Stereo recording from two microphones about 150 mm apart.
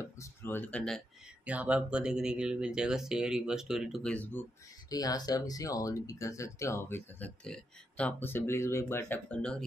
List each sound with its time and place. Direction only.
0.0 s speech: 20° left (ahead or behind)
1.4 s speech: 10° right (ahead or behind); by 4.5 s 10° left (ahead or behind)
4.8 s speech: 25° left (ahead or behind); by 9.7 s 5° left (ahead or behind)